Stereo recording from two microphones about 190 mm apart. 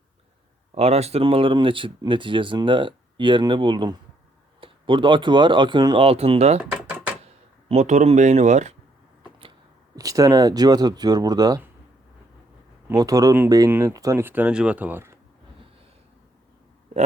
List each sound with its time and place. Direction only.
0.8 s speech: 35° right (ahead or behind)
6.6 s a sound: 5° right (ahead or behind)
7.7 s speech: 40° right (ahead or behind)
9.9 s speech: 20° right (ahead or behind)
12.9 s speech: 20° right (ahead or behind)